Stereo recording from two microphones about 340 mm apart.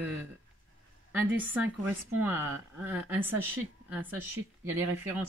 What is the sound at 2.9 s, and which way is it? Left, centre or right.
A woman's voice, centre.